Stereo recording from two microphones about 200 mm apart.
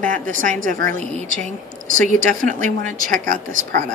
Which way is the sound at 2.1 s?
40° right (ahead or behind).